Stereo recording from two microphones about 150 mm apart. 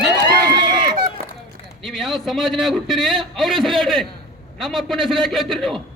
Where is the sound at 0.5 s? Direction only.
30° right (ahead or behind).